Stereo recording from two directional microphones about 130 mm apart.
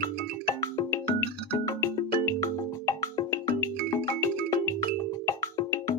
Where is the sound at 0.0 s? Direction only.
30° left (ahead or behind).